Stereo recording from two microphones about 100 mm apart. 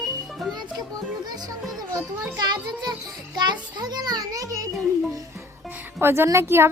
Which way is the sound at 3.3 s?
45° right (ahead or behind).